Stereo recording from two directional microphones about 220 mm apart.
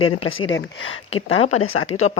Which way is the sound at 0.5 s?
60° left (ahead or behind).